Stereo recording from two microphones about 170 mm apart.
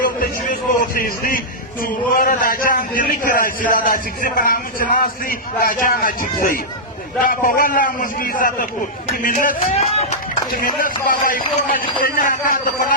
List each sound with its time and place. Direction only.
0.0 s a sound: 55° left (ahead or behind)
0.9 s a man's voice: 60° left (ahead or behind)
9.7 s speech: 40° left (ahead or behind)
10.5 s a man's voice: 55° left (ahead or behind)